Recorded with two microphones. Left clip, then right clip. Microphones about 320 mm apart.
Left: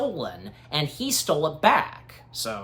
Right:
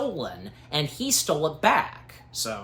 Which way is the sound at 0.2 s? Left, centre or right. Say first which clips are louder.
Left 1 dB; centre.